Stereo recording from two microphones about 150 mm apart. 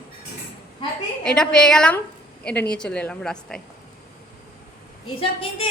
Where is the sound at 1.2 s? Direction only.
5° left (ahead or behind).